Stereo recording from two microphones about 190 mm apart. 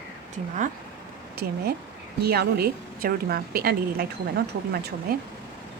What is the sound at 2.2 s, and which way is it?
A woman's voice, 55° right (ahead or behind).